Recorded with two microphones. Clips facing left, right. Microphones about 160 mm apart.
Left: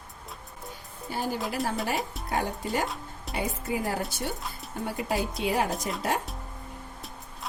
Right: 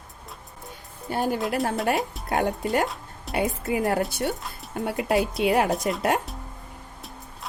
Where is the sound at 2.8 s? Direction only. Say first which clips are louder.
Right 4 dB; centre (ahead or behind).